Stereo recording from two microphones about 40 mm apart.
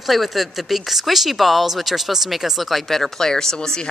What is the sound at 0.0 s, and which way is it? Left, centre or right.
A man's voice, centre.